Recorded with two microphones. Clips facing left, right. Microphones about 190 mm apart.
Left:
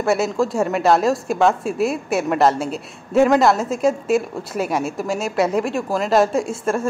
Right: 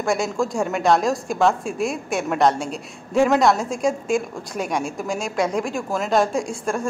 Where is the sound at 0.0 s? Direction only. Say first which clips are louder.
Left 3 dB; 5° left (ahead or behind).